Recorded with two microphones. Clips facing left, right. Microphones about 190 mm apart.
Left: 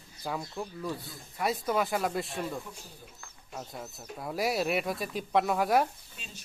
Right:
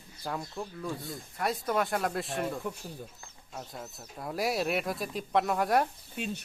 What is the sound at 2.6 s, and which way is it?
Speech, 60° right (ahead or behind).